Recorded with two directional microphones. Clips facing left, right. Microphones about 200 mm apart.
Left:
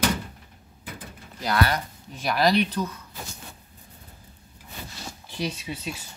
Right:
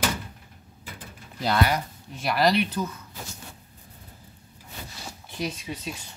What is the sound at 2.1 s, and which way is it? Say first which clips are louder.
Speech: left 1 dB; centre (ahead or behind).